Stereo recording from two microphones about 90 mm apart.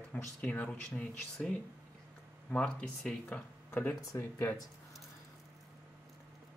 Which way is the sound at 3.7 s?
25° left (ahead or behind).